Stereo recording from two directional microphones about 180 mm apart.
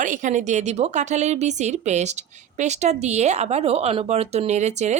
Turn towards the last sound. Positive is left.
turn(degrees=-40)  # may be behind; listen again after turning